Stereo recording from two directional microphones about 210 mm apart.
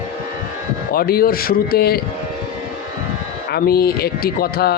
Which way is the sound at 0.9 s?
45° left (ahead or behind).